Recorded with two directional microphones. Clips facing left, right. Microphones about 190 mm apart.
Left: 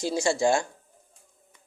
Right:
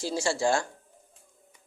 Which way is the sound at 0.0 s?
20° left (ahead or behind).